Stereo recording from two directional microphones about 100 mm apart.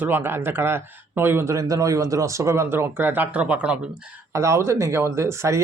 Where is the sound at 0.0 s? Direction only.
20° right (ahead or behind).